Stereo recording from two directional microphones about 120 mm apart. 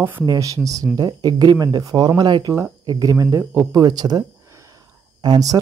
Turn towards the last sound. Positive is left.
turn(degrees=-30)  # may be behind; listen again after turning